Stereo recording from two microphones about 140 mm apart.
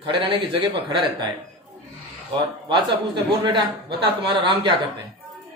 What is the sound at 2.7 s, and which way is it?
A man's voice, 35° right (ahead or behind).